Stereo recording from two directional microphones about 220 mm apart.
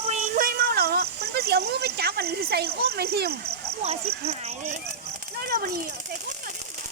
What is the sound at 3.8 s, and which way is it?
Speech, 30° right (ahead or behind).